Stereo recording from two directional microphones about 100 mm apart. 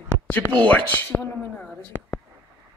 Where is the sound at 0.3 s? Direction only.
20° left (ahead or behind).